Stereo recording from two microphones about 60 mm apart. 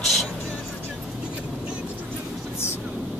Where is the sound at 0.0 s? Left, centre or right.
Centre.